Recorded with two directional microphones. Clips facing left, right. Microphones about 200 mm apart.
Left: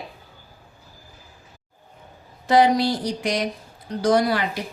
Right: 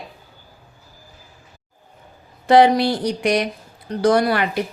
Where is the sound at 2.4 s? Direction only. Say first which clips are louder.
Right 4 dB; 65° right (ahead or behind).